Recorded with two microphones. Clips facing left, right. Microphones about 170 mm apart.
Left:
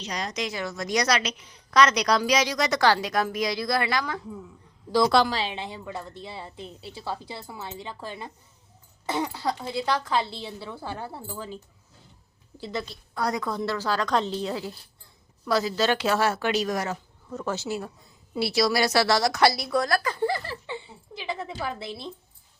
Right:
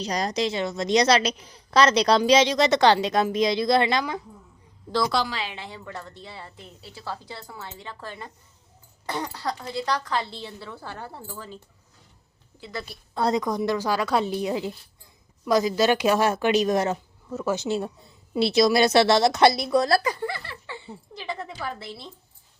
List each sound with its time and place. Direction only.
0.0 s a woman's voice: 35° right (ahead or behind); by 4.2 s 20° right (ahead or behind)
5.3 s a woman's voice: 30° left (ahead or behind)
9.0 s a woman's voice: 5° left (ahead or behind)
13.1 s a woman's voice: 25° right (ahead or behind)
13.4 s a woman's voice: 15° right (ahead or behind)
17.2 s speech: 5° right (ahead or behind)
17.6 s a woman's voice: 25° right (ahead or behind)
20.2 s speech: 40° left (ahead or behind)
21.2 s a sound: 5° left (ahead or behind)
21.4 s a woman's voice: 10° left (ahead or behind)